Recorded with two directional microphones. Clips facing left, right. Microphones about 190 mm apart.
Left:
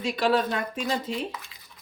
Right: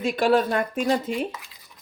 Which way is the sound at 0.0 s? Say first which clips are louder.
Right 4 dB; 50° right (ahead or behind).